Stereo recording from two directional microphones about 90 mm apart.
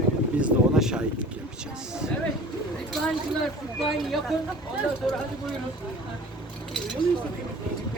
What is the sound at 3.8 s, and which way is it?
Speech, centre (ahead or behind).